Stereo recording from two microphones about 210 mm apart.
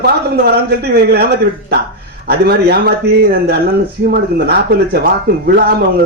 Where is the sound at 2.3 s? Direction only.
50° right (ahead or behind).